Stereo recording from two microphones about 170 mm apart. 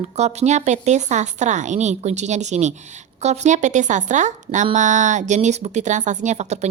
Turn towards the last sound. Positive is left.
turn(degrees=-40)  # may be behind; listen again after turning